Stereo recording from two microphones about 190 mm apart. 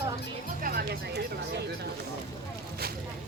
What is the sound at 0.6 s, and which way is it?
Music, 55° right (ahead or behind).